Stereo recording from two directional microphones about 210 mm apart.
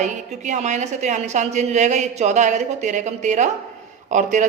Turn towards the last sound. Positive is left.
turn(degrees=-35)  # may be behind; listen again after turning